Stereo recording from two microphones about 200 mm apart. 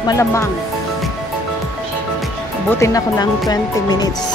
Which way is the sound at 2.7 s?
15° left (ahead or behind).